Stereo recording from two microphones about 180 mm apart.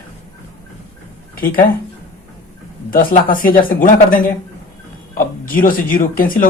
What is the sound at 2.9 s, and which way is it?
Speech, 50° left (ahead or behind).